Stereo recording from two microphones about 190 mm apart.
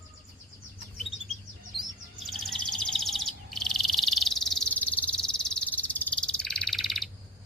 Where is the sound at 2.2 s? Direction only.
Centre (ahead or behind).